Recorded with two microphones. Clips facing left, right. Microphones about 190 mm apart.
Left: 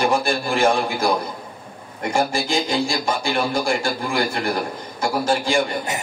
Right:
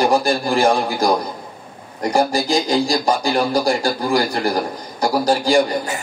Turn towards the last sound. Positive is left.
turn(degrees=-35)  # may be behind; listen again after turning